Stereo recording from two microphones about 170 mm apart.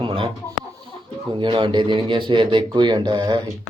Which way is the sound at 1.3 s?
30° right (ahead or behind).